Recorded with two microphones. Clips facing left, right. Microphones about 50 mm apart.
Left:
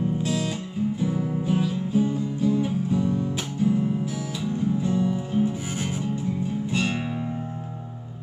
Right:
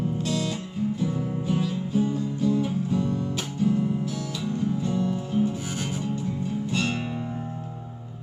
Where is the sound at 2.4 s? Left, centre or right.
Centre.